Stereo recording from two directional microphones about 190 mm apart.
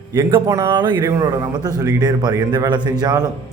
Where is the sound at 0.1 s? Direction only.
25° right (ahead or behind).